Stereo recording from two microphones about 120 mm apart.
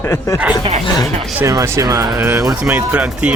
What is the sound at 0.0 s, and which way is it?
Speech, 20° left (ahead or behind).